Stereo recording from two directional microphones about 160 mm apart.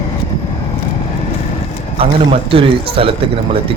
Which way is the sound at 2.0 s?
35° right (ahead or behind).